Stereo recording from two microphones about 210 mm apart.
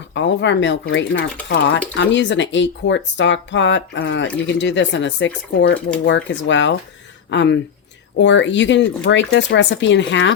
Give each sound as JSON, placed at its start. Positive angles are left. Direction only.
{"t": 0.1, "sound": "speech", "side_deg": 60}